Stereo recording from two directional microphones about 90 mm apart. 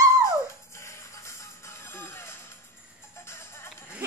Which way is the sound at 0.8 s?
30° left (ahead or behind).